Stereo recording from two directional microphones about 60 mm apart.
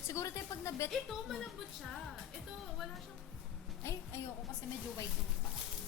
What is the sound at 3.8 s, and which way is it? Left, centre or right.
Speech, left.